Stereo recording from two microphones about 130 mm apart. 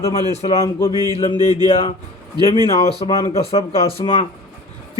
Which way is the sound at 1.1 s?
50° left (ahead or behind).